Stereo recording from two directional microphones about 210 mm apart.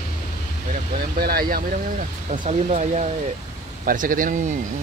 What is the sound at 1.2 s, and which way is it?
Speech, 45° right (ahead or behind).